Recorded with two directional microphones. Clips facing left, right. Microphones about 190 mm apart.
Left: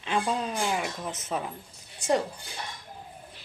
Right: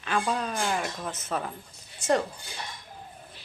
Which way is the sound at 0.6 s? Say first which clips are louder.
Even; 10° left (ahead or behind).